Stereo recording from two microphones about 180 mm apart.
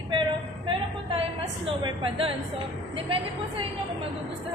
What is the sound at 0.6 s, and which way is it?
A woman's voice, 30° right (ahead or behind).